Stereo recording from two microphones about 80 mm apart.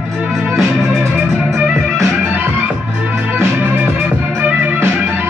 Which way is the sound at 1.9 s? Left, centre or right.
Right.